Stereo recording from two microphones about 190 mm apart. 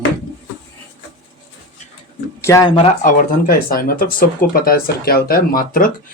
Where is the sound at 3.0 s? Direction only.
45° left (ahead or behind).